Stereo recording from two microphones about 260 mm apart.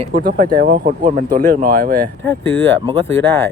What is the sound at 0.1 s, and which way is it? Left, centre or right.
Speech, right.